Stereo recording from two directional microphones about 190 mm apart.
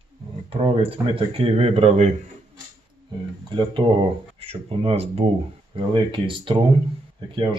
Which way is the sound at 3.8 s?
20° right (ahead or behind).